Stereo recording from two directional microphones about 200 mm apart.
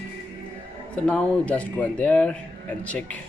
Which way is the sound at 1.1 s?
5° left (ahead or behind).